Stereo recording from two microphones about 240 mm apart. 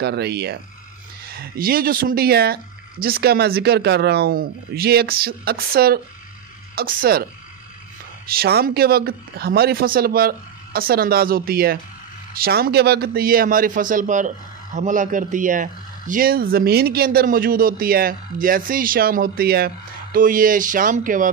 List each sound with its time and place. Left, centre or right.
0.0 s a man's voice: right
8.3 s a man's voice: right